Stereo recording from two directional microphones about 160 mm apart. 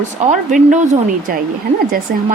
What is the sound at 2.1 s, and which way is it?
Speech, 70° right (ahead or behind).